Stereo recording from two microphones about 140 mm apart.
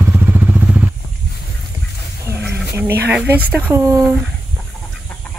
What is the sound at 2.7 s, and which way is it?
Speech, 15° right (ahead or behind).